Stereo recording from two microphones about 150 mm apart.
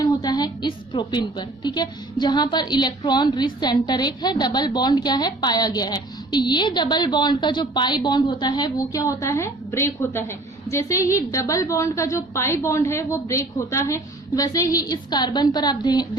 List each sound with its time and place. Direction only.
0.0 s a woman's voice: 25° left (ahead or behind)